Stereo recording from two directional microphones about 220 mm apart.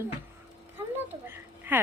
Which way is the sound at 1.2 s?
10° right (ahead or behind).